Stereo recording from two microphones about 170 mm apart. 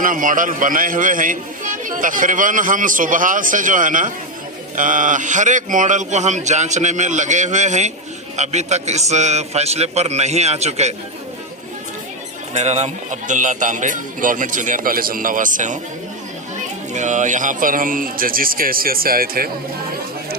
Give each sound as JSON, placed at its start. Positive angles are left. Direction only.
{"t": 0.0, "sound": "a man's voice", "side_deg": -50}
{"t": 12.5, "sound": "a man's voice", "side_deg": -40}
{"t": 16.9, "sound": "a man's voice", "side_deg": -45}